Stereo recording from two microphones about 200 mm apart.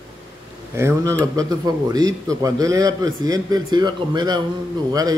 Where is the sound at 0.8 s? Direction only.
15° right (ahead or behind).